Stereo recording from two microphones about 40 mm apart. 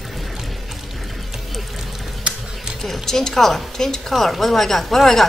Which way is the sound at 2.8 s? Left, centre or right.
Centre.